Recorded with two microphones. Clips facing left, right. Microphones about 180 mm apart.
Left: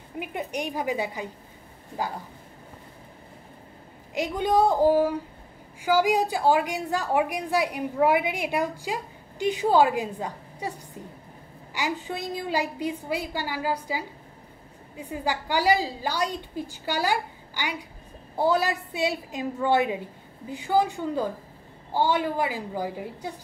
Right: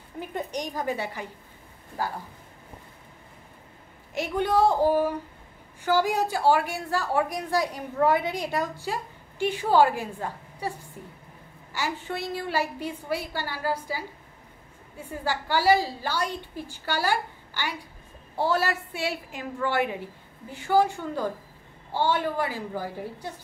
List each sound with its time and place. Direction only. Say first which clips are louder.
0.2 s a woman's voice: left 1 dB; 10° left (ahead or behind)
4.1 s a woman's voice: left 1 dB; 15° left (ahead or behind)
11.7 s a woman's voice: left 1 dB; 15° left (ahead or behind)